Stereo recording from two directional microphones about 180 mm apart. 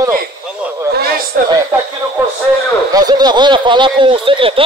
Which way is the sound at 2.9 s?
20° right (ahead or behind).